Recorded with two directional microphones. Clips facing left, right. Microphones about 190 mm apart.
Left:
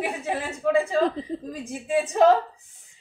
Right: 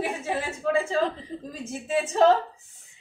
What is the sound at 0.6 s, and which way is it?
A woman's voice, 10° left (ahead or behind).